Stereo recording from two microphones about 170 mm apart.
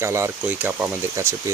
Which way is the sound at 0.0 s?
15° right (ahead or behind).